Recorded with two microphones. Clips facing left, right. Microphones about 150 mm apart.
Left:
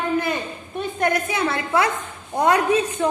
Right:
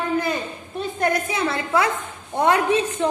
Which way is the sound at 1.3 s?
30° right (ahead or behind).